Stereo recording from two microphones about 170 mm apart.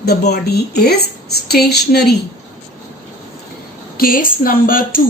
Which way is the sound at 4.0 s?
55° left (ahead or behind).